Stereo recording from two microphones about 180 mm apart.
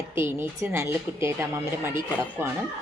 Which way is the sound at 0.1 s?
15° right (ahead or behind).